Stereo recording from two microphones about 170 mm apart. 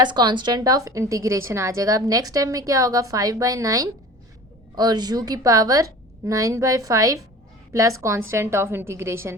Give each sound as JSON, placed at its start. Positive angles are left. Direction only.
{"t": 0.0, "sound": "a woman's voice", "side_deg": -25}